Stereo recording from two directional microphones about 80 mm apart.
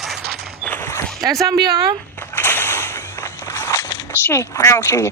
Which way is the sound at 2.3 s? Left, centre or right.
Left.